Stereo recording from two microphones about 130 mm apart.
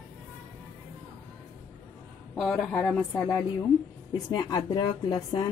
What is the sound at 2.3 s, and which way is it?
Speech, 5° left (ahead or behind).